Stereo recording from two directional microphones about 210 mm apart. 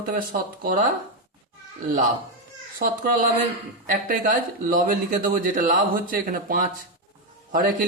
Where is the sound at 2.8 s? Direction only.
40° right (ahead or behind).